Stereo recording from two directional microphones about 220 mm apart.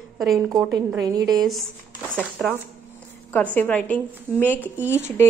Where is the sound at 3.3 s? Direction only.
5° left (ahead or behind).